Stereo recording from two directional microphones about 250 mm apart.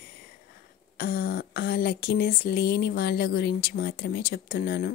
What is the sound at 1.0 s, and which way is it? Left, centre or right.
A woman's voice, left.